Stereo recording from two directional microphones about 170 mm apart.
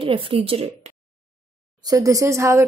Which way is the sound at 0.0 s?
30° right (ahead or behind).